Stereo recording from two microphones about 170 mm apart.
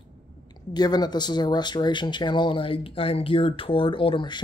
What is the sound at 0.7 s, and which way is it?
Speech, 25° left (ahead or behind).